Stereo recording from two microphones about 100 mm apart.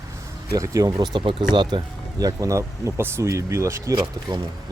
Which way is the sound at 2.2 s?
35° right (ahead or behind).